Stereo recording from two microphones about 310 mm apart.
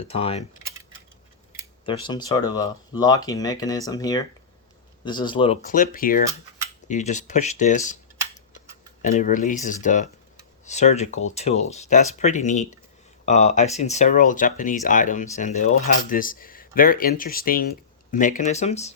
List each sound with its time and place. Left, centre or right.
0.1 s speech: centre
1.8 s speech: centre
9.0 s speech: left